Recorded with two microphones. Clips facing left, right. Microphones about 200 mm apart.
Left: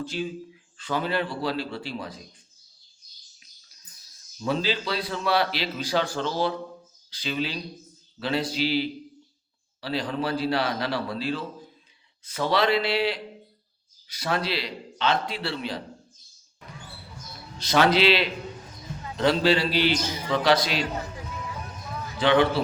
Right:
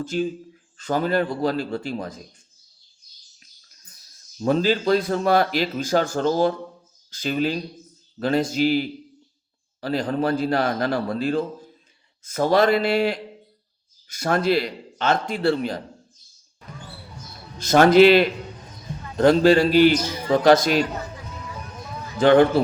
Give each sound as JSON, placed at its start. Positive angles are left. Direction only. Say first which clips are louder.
{"t": 0.0, "sound": "a man's voice", "louder": "right 6 dB", "side_deg": -45}
{"t": 4.4, "sound": "a man's voice", "louder": "right 7 dB", "side_deg": -45}
{"t": 17.6, "sound": "a man's voice", "louder": "right 8 dB", "side_deg": -45}
{"t": 22.2, "sound": "a man's voice", "louder": "right 6 dB", "side_deg": -45}